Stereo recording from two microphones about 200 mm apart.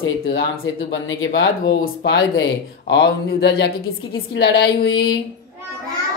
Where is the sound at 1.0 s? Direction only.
75° left (ahead or behind).